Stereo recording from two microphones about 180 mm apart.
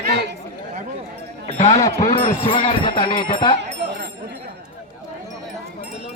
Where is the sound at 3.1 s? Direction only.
25° left (ahead or behind).